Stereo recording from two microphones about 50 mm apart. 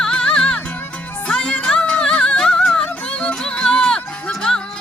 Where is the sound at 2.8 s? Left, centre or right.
Left.